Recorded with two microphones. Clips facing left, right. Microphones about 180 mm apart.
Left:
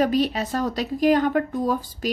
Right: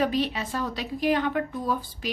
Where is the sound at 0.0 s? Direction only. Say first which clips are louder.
Left 5 dB; 40° left (ahead or behind).